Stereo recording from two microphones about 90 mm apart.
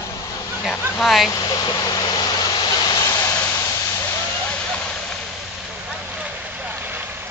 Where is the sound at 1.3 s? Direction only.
40° left (ahead or behind).